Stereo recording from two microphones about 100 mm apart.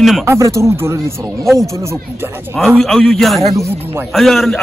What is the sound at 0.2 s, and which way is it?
Speech, 30° right (ahead or behind).